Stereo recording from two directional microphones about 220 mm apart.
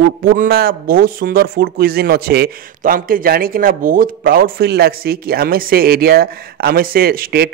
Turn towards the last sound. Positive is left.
turn(degrees=-45)  # may be behind; listen again after turning